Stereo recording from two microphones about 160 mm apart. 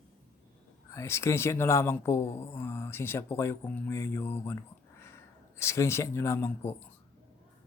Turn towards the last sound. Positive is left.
turn(degrees=15)  # may be behind; listen again after turning